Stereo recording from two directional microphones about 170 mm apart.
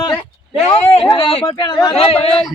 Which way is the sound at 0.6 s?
35° left (ahead or behind).